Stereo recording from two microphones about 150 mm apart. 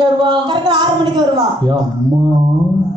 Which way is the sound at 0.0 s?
30° right (ahead or behind).